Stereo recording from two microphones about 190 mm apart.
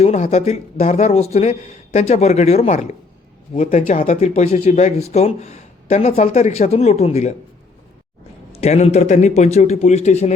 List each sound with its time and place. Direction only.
0.0 s speech: 35° left (ahead or behind)
8.5 s speech: 35° left (ahead or behind)